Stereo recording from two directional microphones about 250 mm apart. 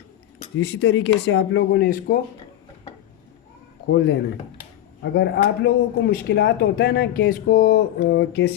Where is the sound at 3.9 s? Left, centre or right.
Left.